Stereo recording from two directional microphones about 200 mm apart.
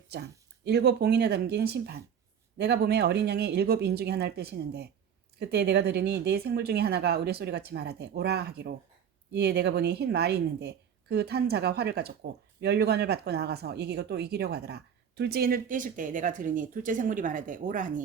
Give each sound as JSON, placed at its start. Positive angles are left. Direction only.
{"t": 0.1, "sound": "speech", "side_deg": -55}